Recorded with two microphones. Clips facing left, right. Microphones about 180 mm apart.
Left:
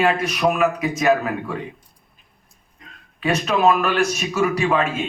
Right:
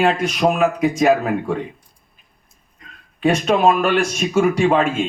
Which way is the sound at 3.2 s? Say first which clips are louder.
Right 3 dB; 30° right (ahead or behind).